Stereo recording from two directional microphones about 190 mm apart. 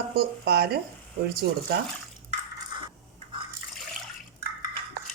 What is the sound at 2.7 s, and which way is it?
Dishes, 25° right (ahead or behind).